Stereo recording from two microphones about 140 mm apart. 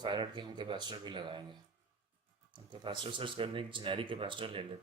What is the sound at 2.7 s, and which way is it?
Speech, 35° right (ahead or behind).